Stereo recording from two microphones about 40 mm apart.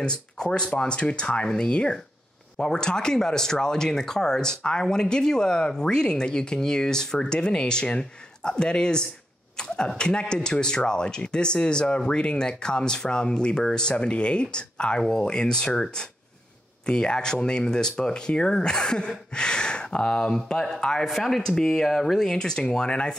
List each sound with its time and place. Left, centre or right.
0.0 s speech: left
21.1 s speech: centre
22.3 s speech: centre